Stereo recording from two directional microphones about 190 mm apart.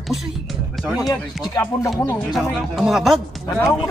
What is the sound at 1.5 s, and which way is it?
Speech, 15° left (ahead or behind).